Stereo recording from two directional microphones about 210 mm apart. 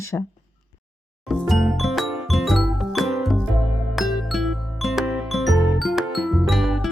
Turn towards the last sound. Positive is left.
turn(degrees=0)  # may be behind; listen again after turning